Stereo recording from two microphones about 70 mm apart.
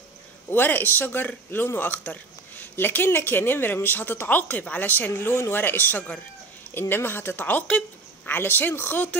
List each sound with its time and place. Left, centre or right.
0.5 s a man's voice: left